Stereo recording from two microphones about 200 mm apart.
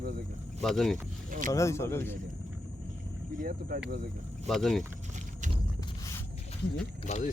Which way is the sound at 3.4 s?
45° right (ahead or behind).